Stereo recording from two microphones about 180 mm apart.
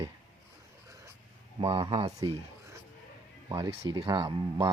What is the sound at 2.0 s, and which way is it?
Speech, 20° right (ahead or behind).